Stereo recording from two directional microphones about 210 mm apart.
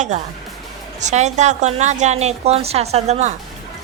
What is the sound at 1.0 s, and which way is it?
A woman's voice, 35° right (ahead or behind).